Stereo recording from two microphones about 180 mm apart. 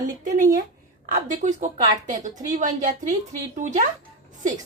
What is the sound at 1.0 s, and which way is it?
Speech, 45° right (ahead or behind).